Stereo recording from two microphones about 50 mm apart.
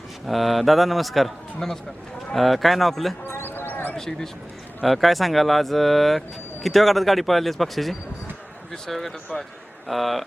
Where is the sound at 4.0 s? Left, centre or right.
Centre.